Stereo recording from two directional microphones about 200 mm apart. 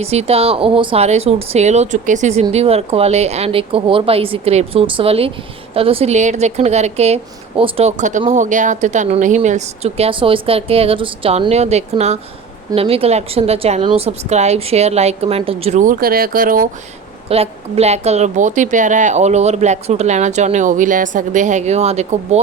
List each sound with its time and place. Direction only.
0.0 s speech: 30° right (ahead or behind)
17.2 s speech: 30° right (ahead or behind)